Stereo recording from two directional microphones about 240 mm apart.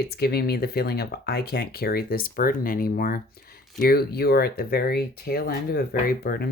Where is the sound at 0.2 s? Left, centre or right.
Left.